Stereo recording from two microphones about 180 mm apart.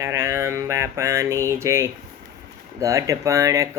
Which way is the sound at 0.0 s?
15° right (ahead or behind).